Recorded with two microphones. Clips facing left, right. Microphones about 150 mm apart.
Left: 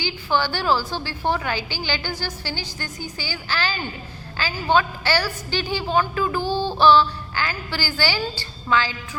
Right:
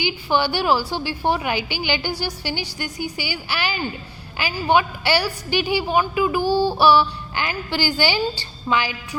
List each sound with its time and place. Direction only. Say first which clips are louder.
0.0 s a woman's voice: right 2 dB; 15° right (ahead or behind)